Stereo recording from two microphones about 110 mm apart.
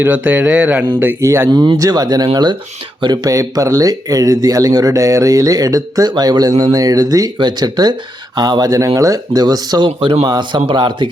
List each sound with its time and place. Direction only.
0.0 s speech: 15° right (ahead or behind)
0.9 s speech: 25° right (ahead or behind); by 11.1 s 45° right (ahead or behind)